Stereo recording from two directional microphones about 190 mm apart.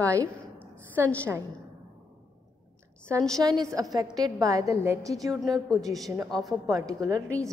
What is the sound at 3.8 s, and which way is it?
A woman's voice, 20° right (ahead or behind).